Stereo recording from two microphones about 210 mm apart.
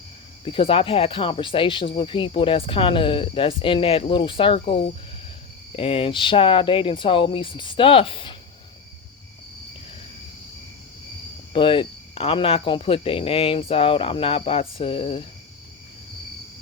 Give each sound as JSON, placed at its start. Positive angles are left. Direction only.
{"t": 0.4, "sound": "speech", "side_deg": 25}
{"t": 11.5, "sound": "speech", "side_deg": 25}